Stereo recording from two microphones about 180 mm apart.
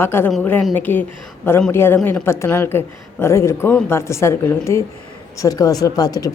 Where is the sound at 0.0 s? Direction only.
15° left (ahead or behind).